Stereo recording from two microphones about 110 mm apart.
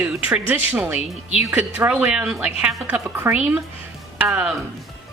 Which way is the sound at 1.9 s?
10° right (ahead or behind).